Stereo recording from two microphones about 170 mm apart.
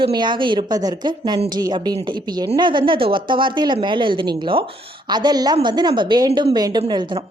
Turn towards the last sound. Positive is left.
turn(degrees=-25)  # may be behind; listen again after turning